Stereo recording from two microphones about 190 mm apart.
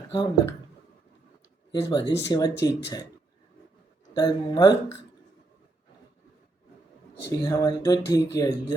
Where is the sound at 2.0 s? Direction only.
65° left (ahead or behind).